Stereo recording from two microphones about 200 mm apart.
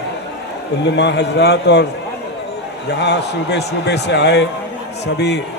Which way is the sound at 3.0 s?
60° left (ahead or behind).